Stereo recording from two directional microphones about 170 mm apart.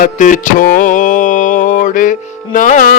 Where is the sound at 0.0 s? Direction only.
50° left (ahead or behind).